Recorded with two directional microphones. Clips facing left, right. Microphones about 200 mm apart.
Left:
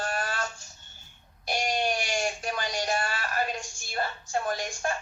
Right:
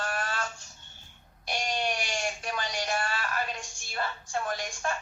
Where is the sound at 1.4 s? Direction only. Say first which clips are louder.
Left 3 dB; 40° left (ahead or behind).